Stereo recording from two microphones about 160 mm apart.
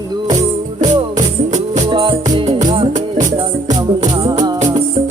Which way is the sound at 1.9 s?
35° right (ahead or behind).